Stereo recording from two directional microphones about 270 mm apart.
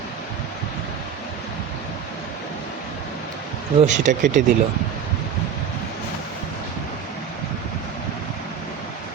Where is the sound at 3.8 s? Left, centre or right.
Right.